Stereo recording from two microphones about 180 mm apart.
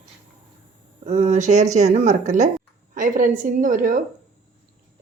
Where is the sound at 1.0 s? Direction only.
40° right (ahead or behind).